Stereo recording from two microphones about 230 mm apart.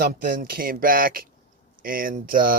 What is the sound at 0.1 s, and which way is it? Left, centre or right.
Speech, right.